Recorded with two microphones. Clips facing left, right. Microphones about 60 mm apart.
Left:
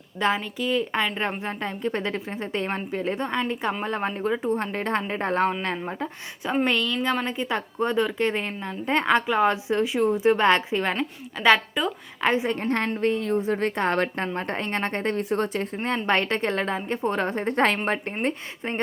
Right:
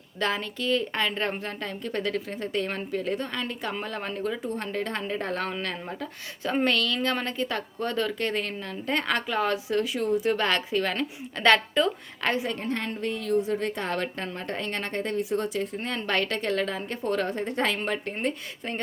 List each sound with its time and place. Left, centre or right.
0.2 s a woman's voice: centre
6.7 s a woman's voice: centre
11.3 s a woman's voice: centre
12.3 s a woman's voice: left
12.5 s a woman's voice: left